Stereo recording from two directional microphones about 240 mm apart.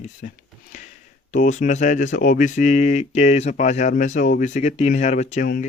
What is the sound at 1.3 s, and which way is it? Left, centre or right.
Speech, left.